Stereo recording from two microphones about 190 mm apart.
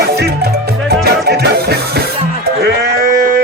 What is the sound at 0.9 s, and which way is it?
Music, 55° right (ahead or behind).